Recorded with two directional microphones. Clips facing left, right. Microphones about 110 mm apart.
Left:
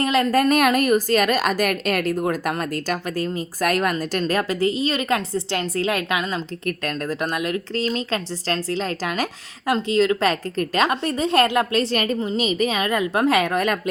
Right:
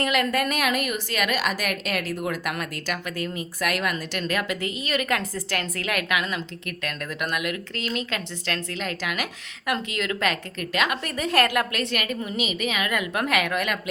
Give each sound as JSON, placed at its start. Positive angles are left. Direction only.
{"t": 0.0, "sound": "a woman's voice", "side_deg": 30}